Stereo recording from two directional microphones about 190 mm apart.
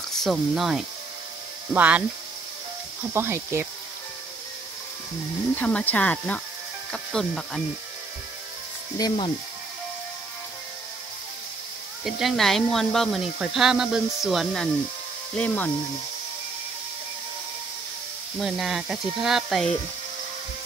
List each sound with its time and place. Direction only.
0.1 s speech: centre (ahead or behind)
3.1 s speech: 15° right (ahead or behind)
5.6 s speech: 5° left (ahead or behind)
8.9 s speech: 25° left (ahead or behind)
12.0 s speech: centre (ahead or behind)
18.4 s speech: centre (ahead or behind)